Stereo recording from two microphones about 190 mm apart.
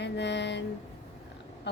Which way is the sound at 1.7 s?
65° left (ahead or behind).